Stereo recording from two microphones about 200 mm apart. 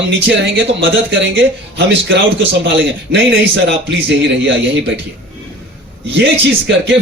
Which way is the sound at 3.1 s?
65° right (ahead or behind).